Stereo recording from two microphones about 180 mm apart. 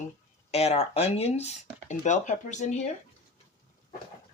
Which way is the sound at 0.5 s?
35° left (ahead or behind).